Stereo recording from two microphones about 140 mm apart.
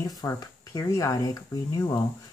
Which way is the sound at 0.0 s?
25° left (ahead or behind).